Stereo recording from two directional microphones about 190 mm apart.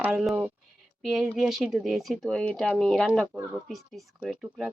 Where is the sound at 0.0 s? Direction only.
5° right (ahead or behind).